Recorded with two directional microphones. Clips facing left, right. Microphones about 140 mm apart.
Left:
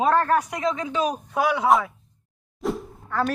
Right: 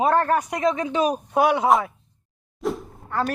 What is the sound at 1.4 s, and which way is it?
Speech, 50° right (ahead or behind).